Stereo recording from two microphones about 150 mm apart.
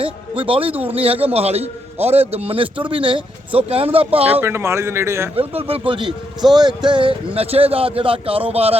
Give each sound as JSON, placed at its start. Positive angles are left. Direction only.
{"t": 0.0, "sound": "speech", "side_deg": -35}
{"t": 4.3, "sound": "speech", "side_deg": -15}
{"t": 5.4, "sound": "speech", "side_deg": -40}